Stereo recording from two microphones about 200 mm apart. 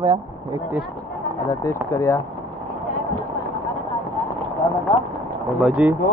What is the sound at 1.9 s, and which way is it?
Speech, 15° left (ahead or behind).